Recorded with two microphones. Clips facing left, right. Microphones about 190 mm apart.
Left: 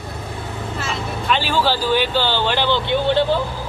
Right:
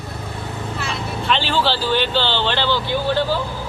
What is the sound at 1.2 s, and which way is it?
Speech, 10° left (ahead or behind).